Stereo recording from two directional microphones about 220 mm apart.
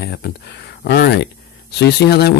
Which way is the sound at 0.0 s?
45° left (ahead or behind).